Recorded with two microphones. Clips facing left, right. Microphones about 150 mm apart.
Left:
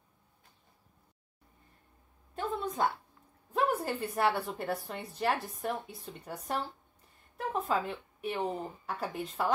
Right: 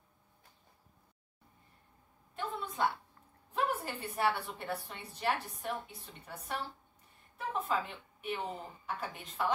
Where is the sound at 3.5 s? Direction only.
40° left (ahead or behind).